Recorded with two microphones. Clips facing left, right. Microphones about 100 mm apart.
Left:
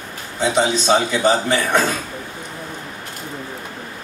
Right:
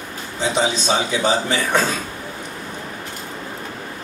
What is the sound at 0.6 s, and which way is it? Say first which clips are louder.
A man's voice: left 4 dB; 55° left (ahead or behind).